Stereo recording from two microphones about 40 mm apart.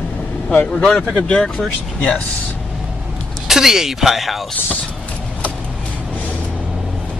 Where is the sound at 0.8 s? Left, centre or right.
Centre.